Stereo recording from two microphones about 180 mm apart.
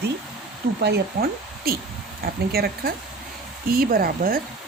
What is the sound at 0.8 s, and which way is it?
Speech, 65° right (ahead or behind).